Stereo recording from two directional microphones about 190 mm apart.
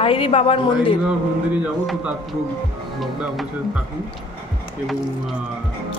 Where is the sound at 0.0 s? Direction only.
30° left (ahead or behind).